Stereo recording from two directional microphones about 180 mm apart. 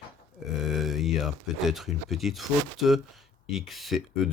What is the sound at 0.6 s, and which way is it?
Speech, centre (ahead or behind).